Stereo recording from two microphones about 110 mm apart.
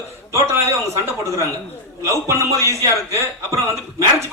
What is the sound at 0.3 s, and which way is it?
A man's voice, 25° right (ahead or behind).